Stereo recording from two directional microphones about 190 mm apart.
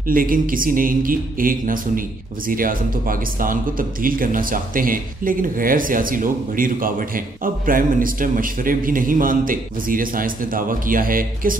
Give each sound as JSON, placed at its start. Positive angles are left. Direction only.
{"t": 0.0, "sound": "a man's voice", "side_deg": -50}